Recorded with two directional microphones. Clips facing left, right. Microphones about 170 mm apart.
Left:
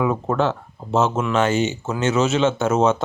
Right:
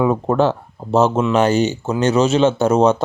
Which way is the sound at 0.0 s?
30° right (ahead or behind).